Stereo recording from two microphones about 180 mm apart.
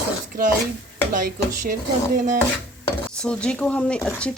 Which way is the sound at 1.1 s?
50° right (ahead or behind).